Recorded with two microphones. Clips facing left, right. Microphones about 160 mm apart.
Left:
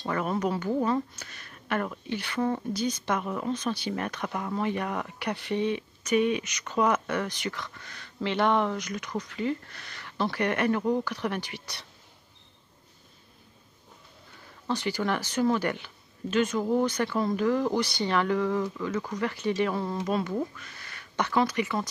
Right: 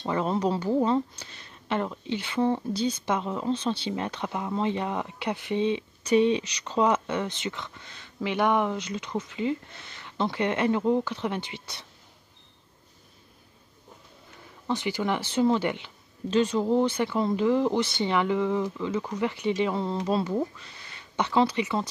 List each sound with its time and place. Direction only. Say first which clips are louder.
0.0 s speech: right 2 dB; 25° right (ahead or behind)
8.7 s speech: right 2 dB; 25° right (ahead or behind)
14.7 s speech: right 1 dB; 20° right (ahead or behind)
16.3 s speech: right 2 dB; 30° right (ahead or behind)